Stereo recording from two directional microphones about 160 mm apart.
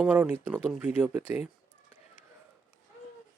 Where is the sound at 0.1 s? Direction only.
10° right (ahead or behind).